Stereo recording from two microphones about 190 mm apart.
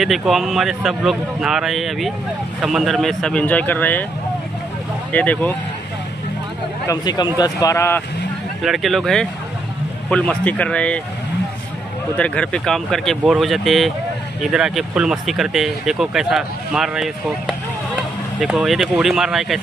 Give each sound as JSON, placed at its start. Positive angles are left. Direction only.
{"t": 0.0, "sound": "speech", "side_deg": 0}
{"t": 5.1, "sound": "speech", "side_deg": 10}
{"t": 6.9, "sound": "speech", "side_deg": 20}
{"t": 8.6, "sound": "speech", "side_deg": 0}
{"t": 12.2, "sound": "speech", "side_deg": 5}